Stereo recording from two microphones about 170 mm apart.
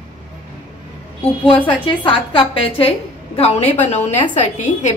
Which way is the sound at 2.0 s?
30° left (ahead or behind).